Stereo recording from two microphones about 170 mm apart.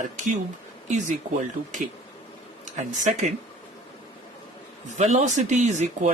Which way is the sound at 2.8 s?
45° right (ahead or behind).